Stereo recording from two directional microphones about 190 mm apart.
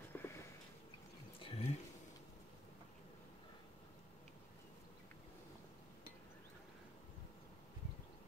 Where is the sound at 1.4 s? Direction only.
30° left (ahead or behind).